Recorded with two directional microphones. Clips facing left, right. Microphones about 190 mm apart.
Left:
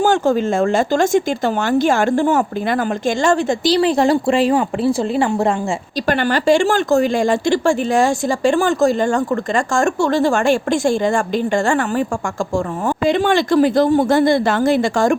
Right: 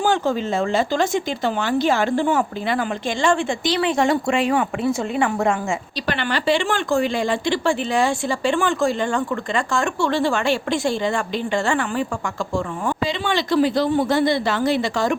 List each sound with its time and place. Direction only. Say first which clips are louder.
0.0 s speech: left 5 dB; 45° left (ahead or behind)
6.1 s speech: left 6 dB; 45° left (ahead or behind)
13.1 s speech: left 10 dB; 50° left (ahead or behind)